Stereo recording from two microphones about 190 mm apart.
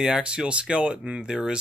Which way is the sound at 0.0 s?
5° right (ahead or behind).